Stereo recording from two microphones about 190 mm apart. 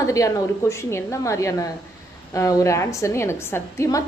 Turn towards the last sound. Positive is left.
turn(degrees=15)  # may be behind; listen again after turning